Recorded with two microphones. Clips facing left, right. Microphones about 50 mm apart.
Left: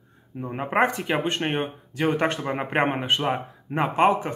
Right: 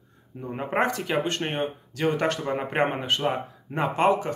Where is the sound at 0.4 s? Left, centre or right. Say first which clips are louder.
Left 3 dB; left.